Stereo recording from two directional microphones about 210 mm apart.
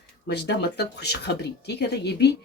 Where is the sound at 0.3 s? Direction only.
50° left (ahead or behind).